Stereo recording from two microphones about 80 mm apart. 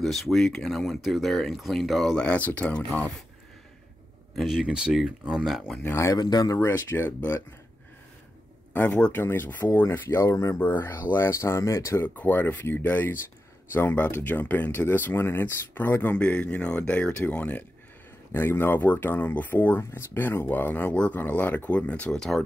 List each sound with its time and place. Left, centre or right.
0.0 s speech: centre
2.1 s speech: centre
4.4 s speech: centre
6.1 s speech: left
6.6 s speech: left
8.7 s speech: centre
9.1 s speech: left
10.3 s speech: left
10.6 s speech: left
12.2 s speech: left; by 22.4 s centre